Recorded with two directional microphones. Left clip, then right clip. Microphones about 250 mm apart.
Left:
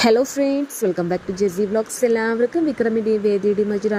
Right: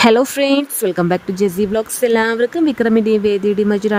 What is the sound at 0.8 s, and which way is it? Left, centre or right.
Speech, right.